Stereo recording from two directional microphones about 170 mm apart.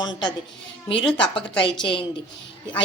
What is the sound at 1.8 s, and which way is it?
Speech, 30° left (ahead or behind).